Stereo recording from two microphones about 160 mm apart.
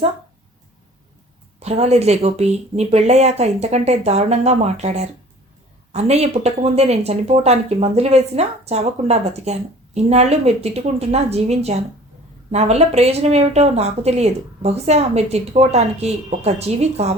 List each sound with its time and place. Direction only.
1.5 s speech: 40° right (ahead or behind)